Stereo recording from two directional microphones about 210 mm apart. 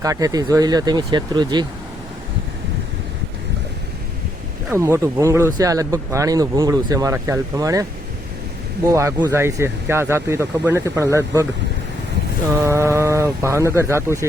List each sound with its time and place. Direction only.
0.0 s speech: 15° right (ahead or behind)
4.7 s speech: 10° right (ahead or behind)
8.9 s speech: 15° right (ahead or behind)
12.6 s speech: 15° right (ahead or behind)